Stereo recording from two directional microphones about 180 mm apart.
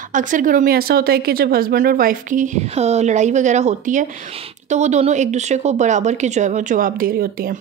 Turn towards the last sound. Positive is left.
turn(degrees=-55)  # may be behind; listen again after turning